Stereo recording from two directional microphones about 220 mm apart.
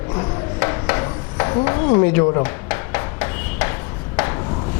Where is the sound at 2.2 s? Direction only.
25° left (ahead or behind).